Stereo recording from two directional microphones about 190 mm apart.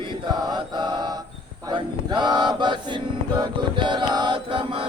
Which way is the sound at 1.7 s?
25° right (ahead or behind).